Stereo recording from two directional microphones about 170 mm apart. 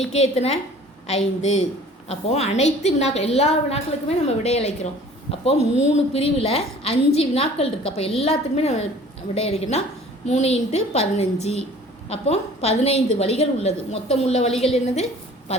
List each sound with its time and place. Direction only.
0.1 s a woman's voice: 40° left (ahead or behind)